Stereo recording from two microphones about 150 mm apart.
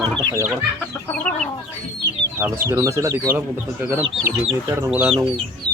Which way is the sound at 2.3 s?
20° right (ahead or behind).